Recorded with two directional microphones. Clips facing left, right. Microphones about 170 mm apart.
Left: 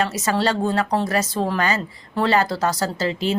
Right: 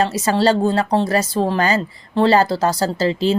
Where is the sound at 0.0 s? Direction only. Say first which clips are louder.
Right 4 dB; 30° right (ahead or behind).